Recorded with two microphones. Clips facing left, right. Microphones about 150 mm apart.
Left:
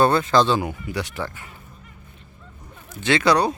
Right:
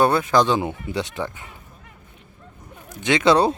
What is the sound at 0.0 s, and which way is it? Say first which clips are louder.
Speech: even; 10° right (ahead or behind).